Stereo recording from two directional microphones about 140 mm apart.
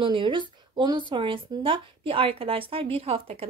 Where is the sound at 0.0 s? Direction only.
35° right (ahead or behind).